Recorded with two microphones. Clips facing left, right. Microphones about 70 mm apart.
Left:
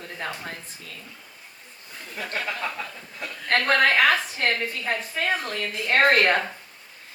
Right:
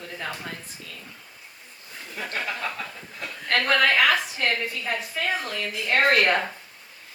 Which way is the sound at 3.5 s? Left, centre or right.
Left.